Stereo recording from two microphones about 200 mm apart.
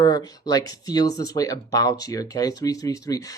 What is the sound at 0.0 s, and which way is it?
Speech, 20° left (ahead or behind).